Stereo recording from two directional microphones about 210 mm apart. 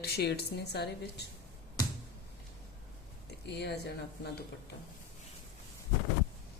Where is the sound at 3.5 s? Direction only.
50° left (ahead or behind).